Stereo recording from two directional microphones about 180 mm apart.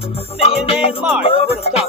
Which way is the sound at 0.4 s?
35° left (ahead or behind).